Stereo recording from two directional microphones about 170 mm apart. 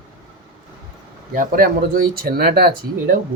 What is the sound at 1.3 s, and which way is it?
Speech, 55° right (ahead or behind).